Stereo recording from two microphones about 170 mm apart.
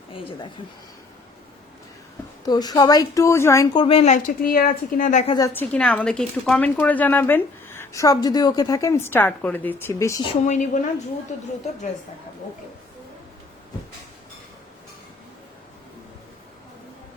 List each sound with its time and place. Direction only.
0.1 s speech: 30° left (ahead or behind)
2.4 s a woman's voice: 25° left (ahead or behind); by 5.2 s 50° left (ahead or behind)
5.4 s speech: 10° left (ahead or behind)
10.4 s a woman's voice: 45° left (ahead or behind)